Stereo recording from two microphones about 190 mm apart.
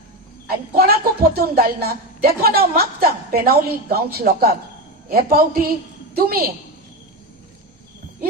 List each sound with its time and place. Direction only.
0.4 s speech: 50° right (ahead or behind)